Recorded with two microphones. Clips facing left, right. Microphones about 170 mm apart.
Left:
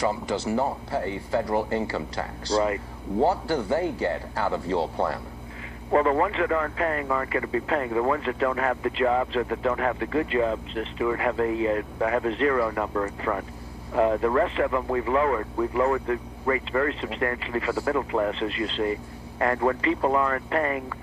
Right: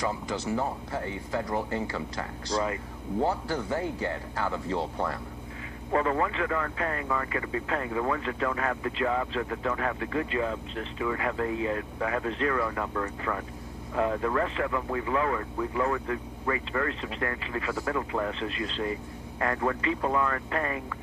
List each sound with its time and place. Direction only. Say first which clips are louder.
0.0 s speech: left 5 dB; 30° left (ahead or behind)